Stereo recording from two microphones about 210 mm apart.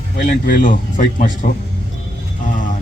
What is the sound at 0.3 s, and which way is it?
A man's voice, 40° left (ahead or behind).